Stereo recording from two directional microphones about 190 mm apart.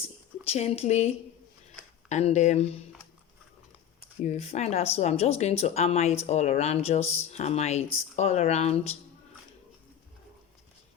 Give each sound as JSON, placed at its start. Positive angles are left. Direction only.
{"t": 0.5, "sound": "speech", "side_deg": 35}
{"t": 4.2, "sound": "speech", "side_deg": 35}